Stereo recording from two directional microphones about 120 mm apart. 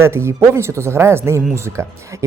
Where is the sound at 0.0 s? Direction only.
20° right (ahead or behind).